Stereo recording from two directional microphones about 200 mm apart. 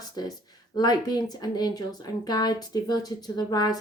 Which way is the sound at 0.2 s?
20° left (ahead or behind).